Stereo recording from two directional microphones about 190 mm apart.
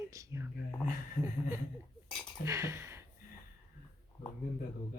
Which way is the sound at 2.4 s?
15° right (ahead or behind).